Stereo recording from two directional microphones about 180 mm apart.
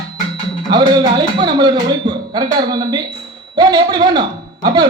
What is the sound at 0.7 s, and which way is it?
A man's voice, 25° right (ahead or behind).